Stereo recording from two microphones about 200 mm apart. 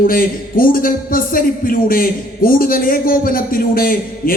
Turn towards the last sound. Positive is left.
turn(degrees=45)  # may be behind; listen again after turning